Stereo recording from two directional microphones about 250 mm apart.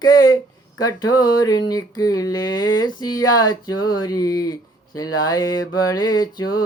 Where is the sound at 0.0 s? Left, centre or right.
Centre.